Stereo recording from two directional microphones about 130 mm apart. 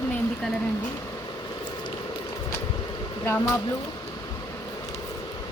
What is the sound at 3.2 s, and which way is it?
Speech, 20° left (ahead or behind).